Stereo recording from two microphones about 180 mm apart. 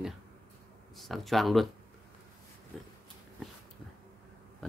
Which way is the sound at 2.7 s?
Centre (ahead or behind).